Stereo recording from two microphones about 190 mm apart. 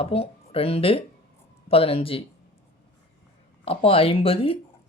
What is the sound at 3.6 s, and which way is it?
Speech, 30° left (ahead or behind).